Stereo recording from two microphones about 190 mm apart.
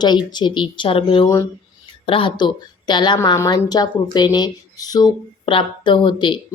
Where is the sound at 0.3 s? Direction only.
25° left (ahead or behind).